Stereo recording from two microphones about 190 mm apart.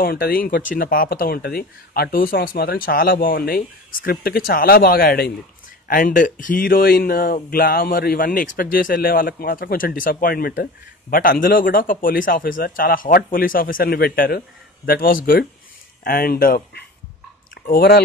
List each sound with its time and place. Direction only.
0.0 s speech: 50° left (ahead or behind)